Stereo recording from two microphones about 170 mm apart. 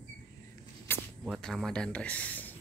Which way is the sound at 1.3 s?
Centre (ahead or behind).